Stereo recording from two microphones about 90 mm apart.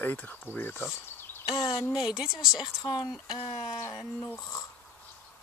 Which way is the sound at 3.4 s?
80° left.